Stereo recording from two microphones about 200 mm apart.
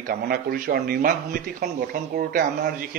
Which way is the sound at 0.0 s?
45° right (ahead or behind).